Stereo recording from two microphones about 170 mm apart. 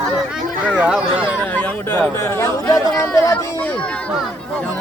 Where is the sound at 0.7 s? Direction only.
5° right (ahead or behind).